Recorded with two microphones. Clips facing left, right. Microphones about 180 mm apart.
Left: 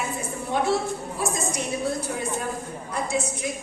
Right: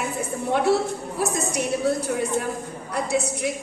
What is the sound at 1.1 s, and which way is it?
Speech, 65° right (ahead or behind).